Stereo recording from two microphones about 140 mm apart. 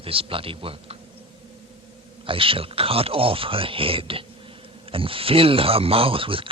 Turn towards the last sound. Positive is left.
turn(degrees=-40)  # may be behind; listen again after turning